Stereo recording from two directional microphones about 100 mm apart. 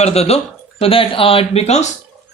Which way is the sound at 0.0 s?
90° left.